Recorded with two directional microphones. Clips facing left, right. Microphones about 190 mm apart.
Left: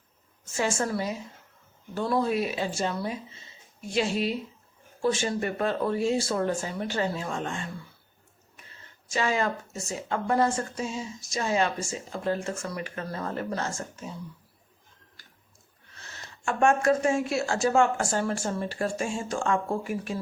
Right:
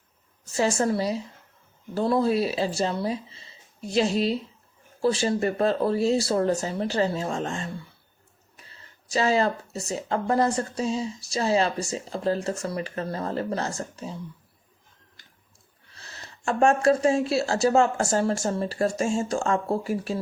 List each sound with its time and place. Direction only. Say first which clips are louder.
0.4 s speech: right 5 dB; 35° right (ahead or behind)
5.1 s speech: right 4 dB; 35° right (ahead or behind)
16.0 s speech: right 1 dB; 35° right (ahead or behind)